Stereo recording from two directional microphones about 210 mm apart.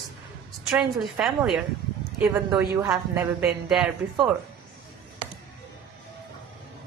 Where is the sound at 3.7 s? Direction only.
Centre (ahead or behind).